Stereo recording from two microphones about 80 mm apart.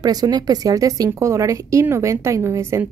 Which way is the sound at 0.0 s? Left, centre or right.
Right.